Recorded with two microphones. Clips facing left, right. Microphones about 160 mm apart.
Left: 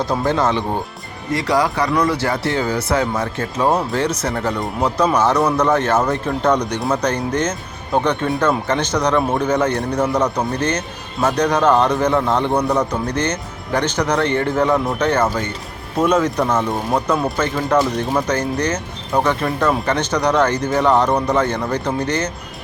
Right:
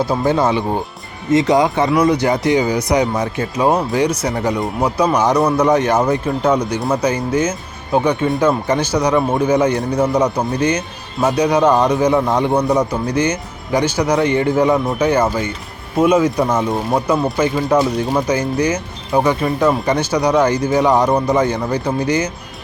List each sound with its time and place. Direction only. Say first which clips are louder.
0.0 s speech: right 2 dB; 5° right (ahead or behind)
1.3 s speech: right 5 dB; 20° right (ahead or behind)